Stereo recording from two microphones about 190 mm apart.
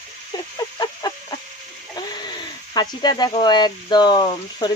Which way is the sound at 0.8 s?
20° left (ahead or behind).